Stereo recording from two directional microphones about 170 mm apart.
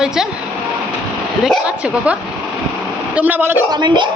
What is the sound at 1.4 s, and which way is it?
A woman's voice, 5° right (ahead or behind).